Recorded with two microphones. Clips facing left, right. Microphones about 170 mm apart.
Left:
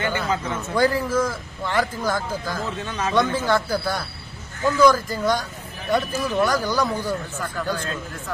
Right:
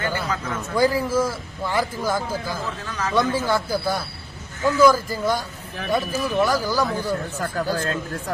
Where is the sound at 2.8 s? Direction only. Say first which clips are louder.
Left 1 dB; 25° left (ahead or behind).